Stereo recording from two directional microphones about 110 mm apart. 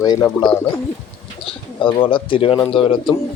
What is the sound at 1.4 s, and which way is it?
A man's voice, 50° left (ahead or behind).